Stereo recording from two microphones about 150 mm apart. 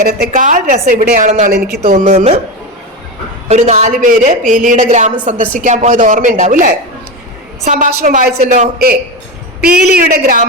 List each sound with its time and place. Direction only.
0.3 s a woman's voice: 60° right (ahead or behind)
2.0 s speech: 45° right (ahead or behind)
3.5 s a woman's voice: 50° right (ahead or behind); by 8.4 s 85° right
8.4 s a woman's voice: 55° right (ahead or behind)
9.6 s a woman's voice: 85° right